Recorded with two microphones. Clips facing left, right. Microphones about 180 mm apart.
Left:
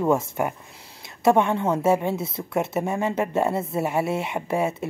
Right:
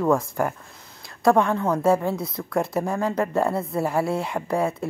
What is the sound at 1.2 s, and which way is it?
Speech, 25° left (ahead or behind).